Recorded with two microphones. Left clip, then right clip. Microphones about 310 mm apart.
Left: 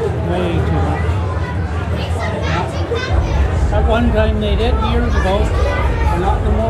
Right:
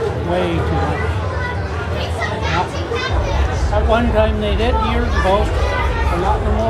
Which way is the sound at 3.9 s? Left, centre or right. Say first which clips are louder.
Right 1 dB; centre.